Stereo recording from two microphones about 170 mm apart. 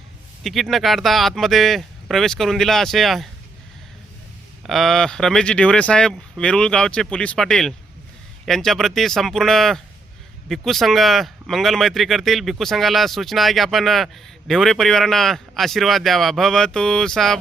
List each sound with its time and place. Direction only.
0.4 s speech: centre (ahead or behind)
4.6 s speech: centre (ahead or behind)